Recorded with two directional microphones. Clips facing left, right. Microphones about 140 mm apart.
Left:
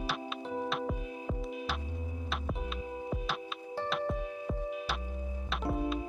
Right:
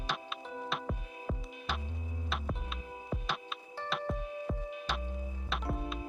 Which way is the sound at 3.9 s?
Centre (ahead or behind).